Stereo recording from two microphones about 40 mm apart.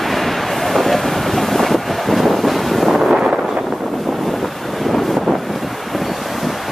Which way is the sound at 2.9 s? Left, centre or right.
Centre.